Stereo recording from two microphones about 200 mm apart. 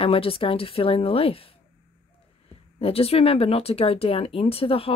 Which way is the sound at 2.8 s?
30° left (ahead or behind).